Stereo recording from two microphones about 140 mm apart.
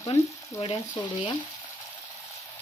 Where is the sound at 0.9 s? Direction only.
30° left (ahead or behind).